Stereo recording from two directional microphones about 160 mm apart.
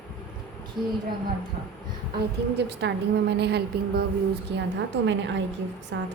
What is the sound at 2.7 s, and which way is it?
A woman's voice, 90° right.